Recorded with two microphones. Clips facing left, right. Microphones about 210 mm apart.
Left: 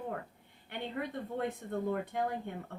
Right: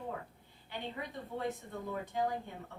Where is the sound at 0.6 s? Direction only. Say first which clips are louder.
Left 4 dB; 55° left (ahead or behind).